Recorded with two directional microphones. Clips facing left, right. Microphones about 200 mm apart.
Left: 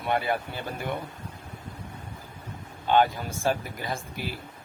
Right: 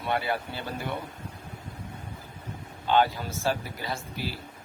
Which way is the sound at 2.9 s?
50° left (ahead or behind).